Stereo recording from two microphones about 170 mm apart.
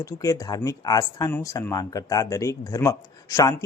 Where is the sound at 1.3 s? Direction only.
10° left (ahead or behind).